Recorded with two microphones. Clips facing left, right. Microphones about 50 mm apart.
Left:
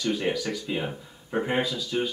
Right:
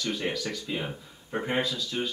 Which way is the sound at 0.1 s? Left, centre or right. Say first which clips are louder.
Left 5 dB; centre.